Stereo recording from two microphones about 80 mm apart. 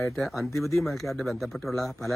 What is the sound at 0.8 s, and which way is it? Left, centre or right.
Speech, centre.